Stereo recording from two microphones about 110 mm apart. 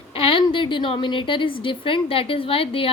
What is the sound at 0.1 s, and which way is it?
A woman's voice, 55° left (ahead or behind).